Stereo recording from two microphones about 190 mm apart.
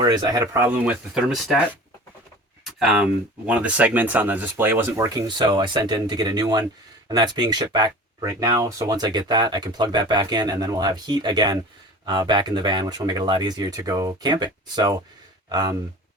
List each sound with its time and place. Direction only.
0.0 s speech: 20° right (ahead or behind); by 1.6 s 5° right (ahead or behind)
2.6 s speech: centre (ahead or behind); by 15.7 s 20° right (ahead or behind)